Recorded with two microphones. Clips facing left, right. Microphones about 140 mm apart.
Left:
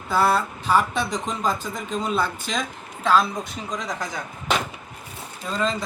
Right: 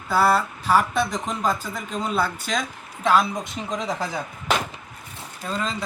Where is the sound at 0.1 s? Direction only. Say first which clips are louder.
Right 1 dB; 5° right (ahead or behind).